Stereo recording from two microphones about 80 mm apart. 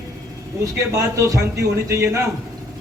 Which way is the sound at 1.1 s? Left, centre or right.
Right.